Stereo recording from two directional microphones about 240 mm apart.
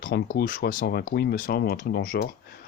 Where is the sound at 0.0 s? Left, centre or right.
Left.